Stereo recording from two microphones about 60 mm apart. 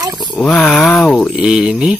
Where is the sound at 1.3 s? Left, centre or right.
Centre.